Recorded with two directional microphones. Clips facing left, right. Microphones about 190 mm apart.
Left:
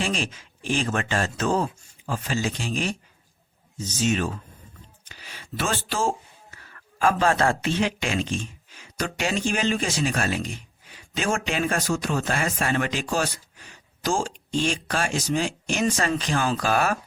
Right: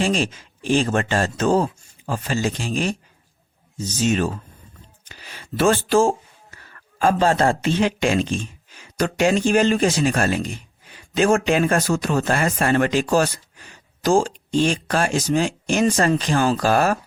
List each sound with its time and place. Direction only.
0.0 s speech: 35° right (ahead or behind)
4.1 s speech: 35° right (ahead or behind)
5.5 s speech: 50° right (ahead or behind)
7.0 s speech: 30° right (ahead or behind)
14.6 s speech: 45° right (ahead or behind)